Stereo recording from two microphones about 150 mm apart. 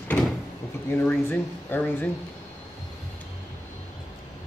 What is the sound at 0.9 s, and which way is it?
Speech, 15° left (ahead or behind).